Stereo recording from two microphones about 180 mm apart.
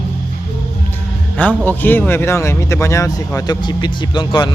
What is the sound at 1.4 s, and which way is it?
Speech, 10° left (ahead or behind).